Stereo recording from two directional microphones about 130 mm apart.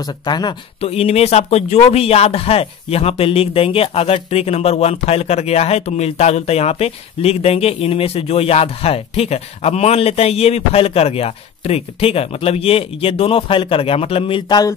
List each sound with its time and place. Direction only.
0.0 s speech: 30° left (ahead or behind)
0.7 s a man's voice: 50° left (ahead or behind)